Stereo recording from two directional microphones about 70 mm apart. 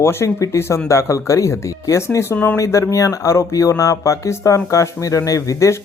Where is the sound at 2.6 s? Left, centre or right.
Left.